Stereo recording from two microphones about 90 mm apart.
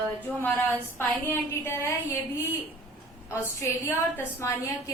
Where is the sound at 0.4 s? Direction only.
20° left (ahead or behind).